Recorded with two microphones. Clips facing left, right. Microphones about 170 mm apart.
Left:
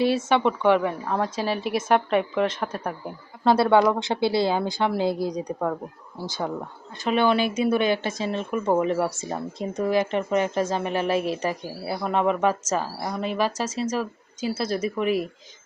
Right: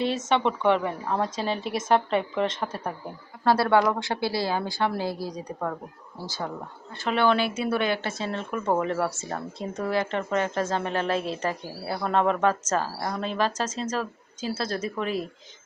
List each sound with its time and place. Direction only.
0.3 s speech: 5° left (ahead or behind)
3.4 s speech: 20° left (ahead or behind)